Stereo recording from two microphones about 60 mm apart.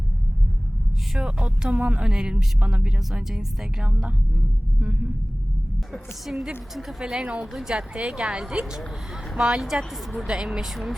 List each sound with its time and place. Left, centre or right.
1.2 s speech: centre
5.9 s speech: centre
7.0 s speech: centre
7.9 s speech: centre